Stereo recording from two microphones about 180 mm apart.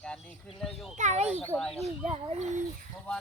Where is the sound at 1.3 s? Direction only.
10° right (ahead or behind).